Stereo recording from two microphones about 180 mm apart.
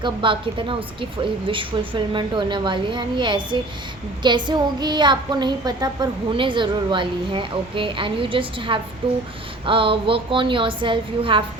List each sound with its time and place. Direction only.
0.0 s a woman's voice: 30° right (ahead or behind)
9.0 s a sound: 30° right (ahead or behind)
9.6 s a woman's voice: 30° right (ahead or behind)